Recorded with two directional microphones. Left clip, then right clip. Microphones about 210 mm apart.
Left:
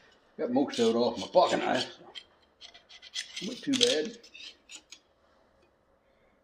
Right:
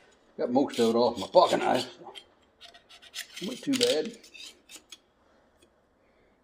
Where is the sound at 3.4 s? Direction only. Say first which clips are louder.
Right 3 dB; 10° right (ahead or behind).